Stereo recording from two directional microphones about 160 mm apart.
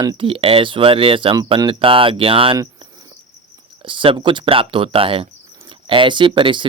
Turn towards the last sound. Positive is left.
turn(degrees=-30)  # may be behind; listen again after turning